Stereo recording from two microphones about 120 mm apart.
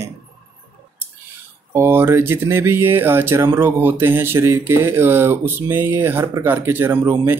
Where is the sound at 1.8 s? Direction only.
20° right (ahead or behind).